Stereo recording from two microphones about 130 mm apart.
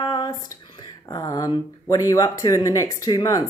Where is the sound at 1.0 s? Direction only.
25° left (ahead or behind).